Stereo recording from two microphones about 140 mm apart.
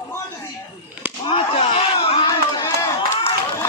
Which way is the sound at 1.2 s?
45° left (ahead or behind).